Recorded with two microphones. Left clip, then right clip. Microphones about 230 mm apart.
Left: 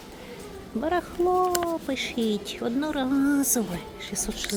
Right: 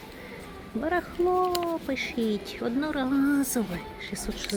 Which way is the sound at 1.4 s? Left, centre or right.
Left.